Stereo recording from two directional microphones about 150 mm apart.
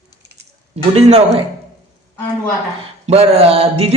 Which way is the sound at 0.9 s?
45° right (ahead or behind).